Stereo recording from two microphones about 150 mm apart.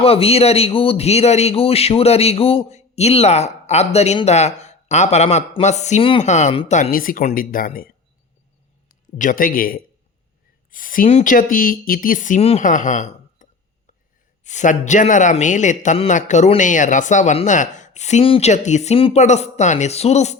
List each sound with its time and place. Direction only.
0.0 s speech: 40° left (ahead or behind)
6.9 s speech: 70° left (ahead or behind)
9.1 s speech: 60° left (ahead or behind)
12.6 s a woman's voice: 60° left (ahead or behind)